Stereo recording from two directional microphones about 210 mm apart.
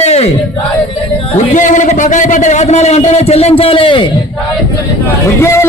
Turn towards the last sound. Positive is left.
turn(degrees=15)  # may be behind; listen again after turning